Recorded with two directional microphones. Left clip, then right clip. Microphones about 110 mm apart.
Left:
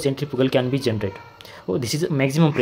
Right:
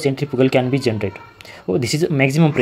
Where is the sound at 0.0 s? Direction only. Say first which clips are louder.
Right 4 dB; 20° right (ahead or behind).